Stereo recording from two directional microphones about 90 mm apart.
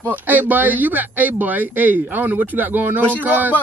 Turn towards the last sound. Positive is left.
turn(degrees=-20)  # may be behind; listen again after turning